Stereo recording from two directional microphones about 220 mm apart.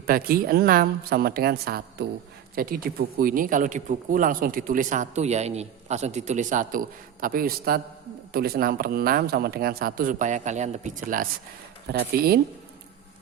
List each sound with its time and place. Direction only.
0.1 s speech: 40° right (ahead or behind)